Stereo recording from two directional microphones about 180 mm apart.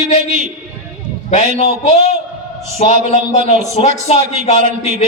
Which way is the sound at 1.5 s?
35° left (ahead or behind).